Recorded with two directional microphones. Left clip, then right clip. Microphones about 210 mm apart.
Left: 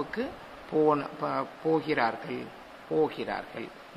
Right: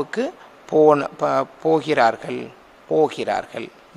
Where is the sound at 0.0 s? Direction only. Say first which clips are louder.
Right 9 dB; 60° right (ahead or behind).